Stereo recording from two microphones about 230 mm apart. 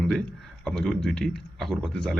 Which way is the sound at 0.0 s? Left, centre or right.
Centre.